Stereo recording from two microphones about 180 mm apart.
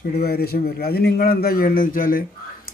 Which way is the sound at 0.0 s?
60° left (ahead or behind).